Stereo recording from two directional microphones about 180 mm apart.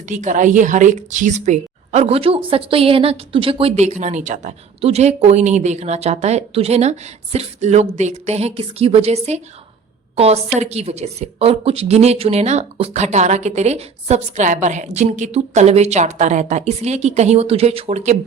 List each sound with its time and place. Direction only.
0.0 s speech: 45° right (ahead or behind)